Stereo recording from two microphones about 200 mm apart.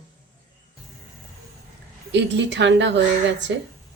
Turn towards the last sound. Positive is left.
turn(degrees=-60)  # may be behind; listen again after turning